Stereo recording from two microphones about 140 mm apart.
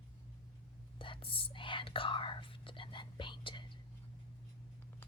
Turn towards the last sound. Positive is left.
turn(degrees=35)  # may be behind; listen again after turning